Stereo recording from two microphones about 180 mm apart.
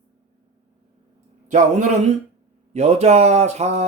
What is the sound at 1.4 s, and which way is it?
A man's voice, 40° right (ahead or behind).